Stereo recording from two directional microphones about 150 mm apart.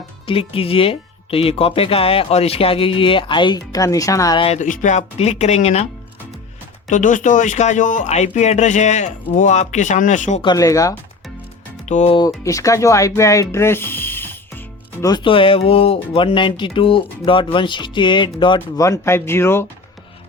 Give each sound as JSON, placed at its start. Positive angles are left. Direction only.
{"t": 0.3, "sound": "speech", "side_deg": 40}
{"t": 4.4, "sound": "speech", "side_deg": 40}
{"t": 4.6, "sound": "speech", "side_deg": 55}
{"t": 6.9, "sound": "speech", "side_deg": 55}
{"t": 10.4, "sound": "speech", "side_deg": 25}
{"t": 11.9, "sound": "speech", "side_deg": 50}
{"t": 12.1, "sound": "speech", "side_deg": 25}
{"t": 15.0, "sound": "speech", "side_deg": 30}
{"t": 18.8, "sound": "speech", "side_deg": 20}